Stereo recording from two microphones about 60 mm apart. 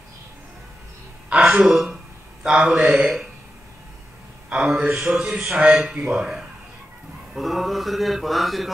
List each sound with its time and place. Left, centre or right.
1.3 s a man's voice: centre
4.5 s speech: centre
4.8 s a sound: right
5.1 s speech: centre
7.3 s mantra: centre